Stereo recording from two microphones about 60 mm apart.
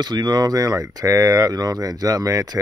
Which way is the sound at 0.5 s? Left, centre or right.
Right.